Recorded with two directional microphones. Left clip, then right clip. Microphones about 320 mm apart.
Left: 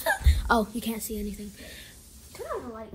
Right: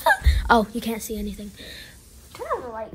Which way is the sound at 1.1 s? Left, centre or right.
Centre.